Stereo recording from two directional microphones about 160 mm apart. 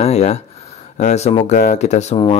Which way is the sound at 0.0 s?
45° left (ahead or behind).